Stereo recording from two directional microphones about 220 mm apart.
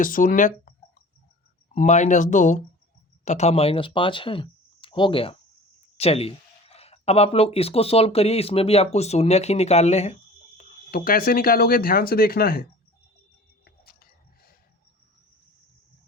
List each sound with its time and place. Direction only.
0.0 s speech: 40° left (ahead or behind)
1.7 s speech: 30° left (ahead or behind)
10.6 s speech: 40° left (ahead or behind)